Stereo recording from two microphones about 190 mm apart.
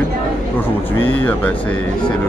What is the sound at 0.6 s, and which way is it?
Speech, 10° left (ahead or behind).